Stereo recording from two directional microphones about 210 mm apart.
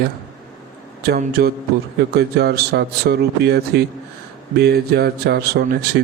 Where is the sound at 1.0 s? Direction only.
45° right (ahead or behind).